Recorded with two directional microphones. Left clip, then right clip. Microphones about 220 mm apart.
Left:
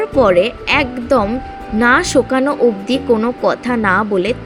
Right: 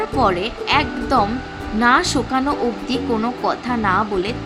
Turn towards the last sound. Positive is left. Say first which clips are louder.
# left 4 dB
turn(degrees=20)  # may be behind; listen again after turning